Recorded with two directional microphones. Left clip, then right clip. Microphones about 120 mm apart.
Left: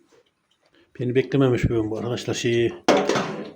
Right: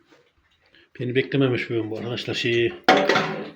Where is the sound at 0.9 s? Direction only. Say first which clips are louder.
Left 1 dB; 25° left (ahead or behind).